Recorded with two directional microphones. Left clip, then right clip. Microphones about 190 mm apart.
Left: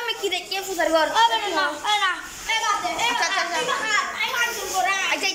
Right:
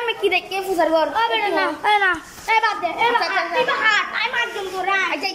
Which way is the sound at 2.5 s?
60° right (ahead or behind).